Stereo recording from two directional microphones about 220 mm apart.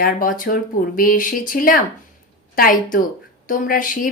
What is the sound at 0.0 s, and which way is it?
A woman's voice, 40° left (ahead or behind).